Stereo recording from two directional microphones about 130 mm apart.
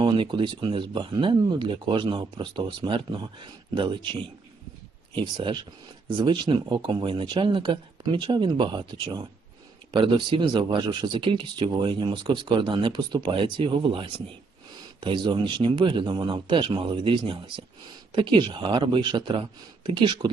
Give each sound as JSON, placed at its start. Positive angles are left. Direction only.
{"t": 0.0, "sound": "speech", "side_deg": -40}